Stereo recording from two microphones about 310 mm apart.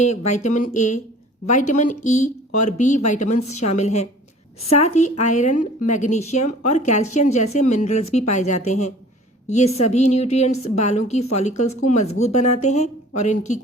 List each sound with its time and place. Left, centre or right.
0.0 s speech: left